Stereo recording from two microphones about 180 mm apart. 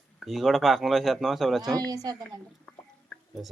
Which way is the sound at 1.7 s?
20° right (ahead or behind).